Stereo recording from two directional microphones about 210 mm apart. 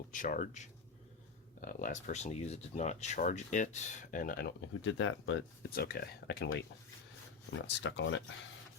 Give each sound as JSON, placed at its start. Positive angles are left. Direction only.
{"t": 0.1, "sound": "speech", "side_deg": 40}